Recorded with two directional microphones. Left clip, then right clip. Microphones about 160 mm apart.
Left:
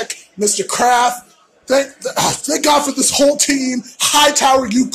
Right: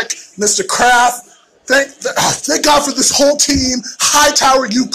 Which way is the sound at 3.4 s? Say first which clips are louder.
Right 3 dB; 10° left (ahead or behind).